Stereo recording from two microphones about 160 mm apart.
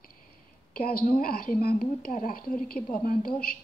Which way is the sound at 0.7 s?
65° left (ahead or behind).